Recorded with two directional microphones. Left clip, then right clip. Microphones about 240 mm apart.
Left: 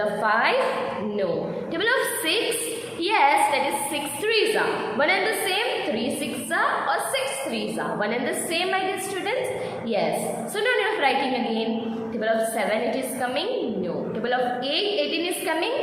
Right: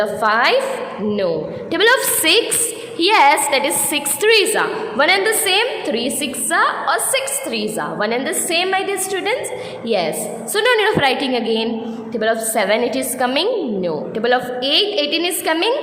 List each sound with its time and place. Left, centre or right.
0.0 s a woman's voice: right
1.7 s a woman's voice: right
10.5 s a woman's voice: right